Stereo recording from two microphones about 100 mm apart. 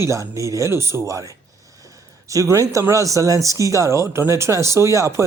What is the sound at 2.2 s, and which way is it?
Speech, 30° right (ahead or behind).